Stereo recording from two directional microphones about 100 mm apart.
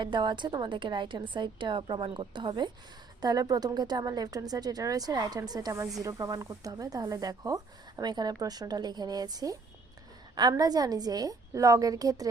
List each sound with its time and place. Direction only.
0.0 s a woman's voice: 50° right (ahead or behind)
3.2 s speech: 40° right (ahead or behind)